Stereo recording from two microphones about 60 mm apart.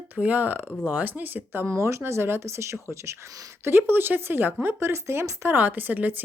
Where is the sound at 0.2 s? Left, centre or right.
Right.